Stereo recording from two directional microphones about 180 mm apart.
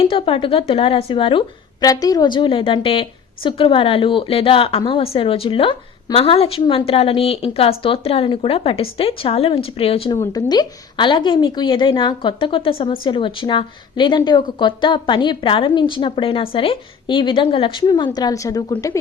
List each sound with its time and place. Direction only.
0.0 s a woman's voice: 30° left (ahead or behind)
10.2 s a woman's voice: 20° left (ahead or behind)